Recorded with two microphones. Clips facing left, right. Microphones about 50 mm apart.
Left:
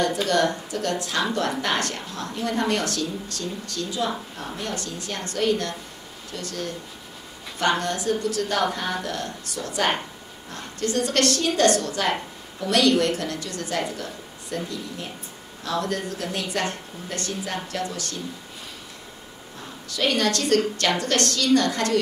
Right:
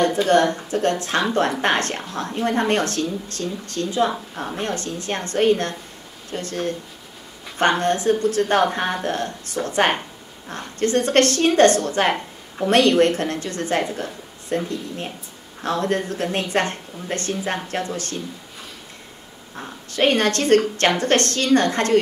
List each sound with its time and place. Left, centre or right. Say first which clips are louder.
0.0 s a woman's voice: right 5 dB; right
19.5 s a woman's voice: right 5 dB; right